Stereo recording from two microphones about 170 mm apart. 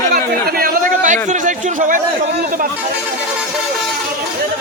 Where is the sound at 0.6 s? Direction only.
50° right (ahead or behind).